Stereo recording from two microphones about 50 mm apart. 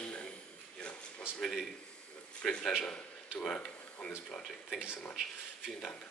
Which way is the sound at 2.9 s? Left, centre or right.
Centre.